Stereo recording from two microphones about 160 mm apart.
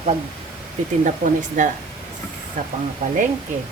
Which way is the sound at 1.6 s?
55° right (ahead or behind).